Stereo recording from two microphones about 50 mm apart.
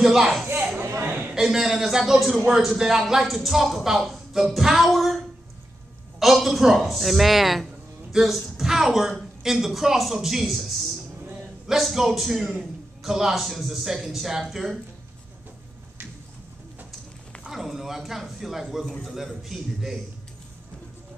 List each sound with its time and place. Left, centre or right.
0.0 s a man's voice: centre
0.8 s a sound: right
1.3 s a man's voice: centre
17.4 s a woman's voice: centre